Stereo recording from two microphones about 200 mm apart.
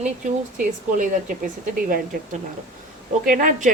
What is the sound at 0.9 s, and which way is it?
A woman's voice, 45° right (ahead or behind).